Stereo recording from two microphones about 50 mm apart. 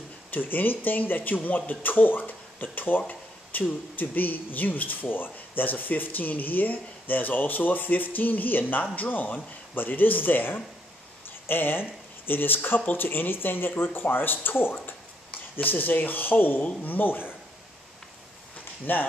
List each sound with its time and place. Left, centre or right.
0.3 s speech: left
11.2 s a sound: left
12.3 s speech: left
18.9 s speech: left